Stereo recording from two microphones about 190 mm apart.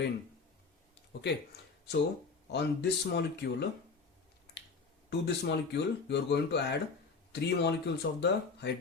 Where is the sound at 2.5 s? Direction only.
60° left (ahead or behind).